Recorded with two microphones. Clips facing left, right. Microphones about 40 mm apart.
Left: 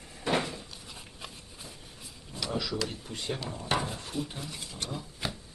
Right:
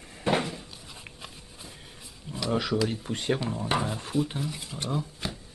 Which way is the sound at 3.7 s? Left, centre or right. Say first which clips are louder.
Right 3 dB; centre.